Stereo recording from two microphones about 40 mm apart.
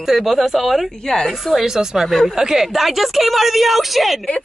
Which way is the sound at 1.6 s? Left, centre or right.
Centre.